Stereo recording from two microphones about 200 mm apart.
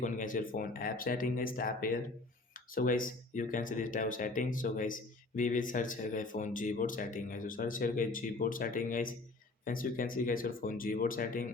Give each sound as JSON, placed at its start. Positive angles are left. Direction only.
{"t": 0.0, "sound": "speech", "side_deg": 40}